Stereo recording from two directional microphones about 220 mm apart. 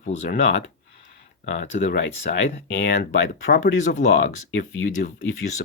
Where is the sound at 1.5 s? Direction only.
50° left (ahead or behind).